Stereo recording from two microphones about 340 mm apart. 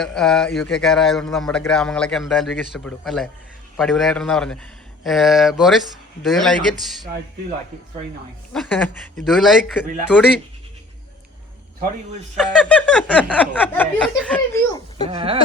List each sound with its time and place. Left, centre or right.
0.0 s a man's voice: centre
8.5 s a man's voice: centre
12.4 s a man's voice: centre
15.1 s speech: centre